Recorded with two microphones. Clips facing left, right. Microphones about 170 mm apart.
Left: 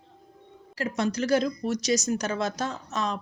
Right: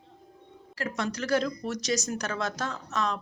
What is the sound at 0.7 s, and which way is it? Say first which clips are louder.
Speech: left 5 dB; 20° left (ahead or behind).